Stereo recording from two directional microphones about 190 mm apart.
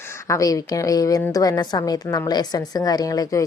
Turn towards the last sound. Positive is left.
turn(degrees=20)  # may be behind; listen again after turning